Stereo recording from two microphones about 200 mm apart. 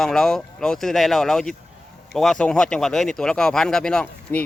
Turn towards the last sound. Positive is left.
turn(degrees=5)  # may be behind; listen again after turning